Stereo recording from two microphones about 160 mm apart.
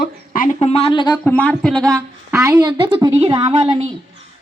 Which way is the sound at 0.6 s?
40° left (ahead or behind).